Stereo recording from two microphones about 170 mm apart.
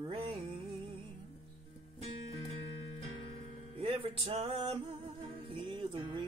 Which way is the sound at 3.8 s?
35° right (ahead or behind).